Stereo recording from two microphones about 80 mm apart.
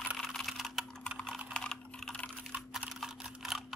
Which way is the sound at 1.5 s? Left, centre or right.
Centre.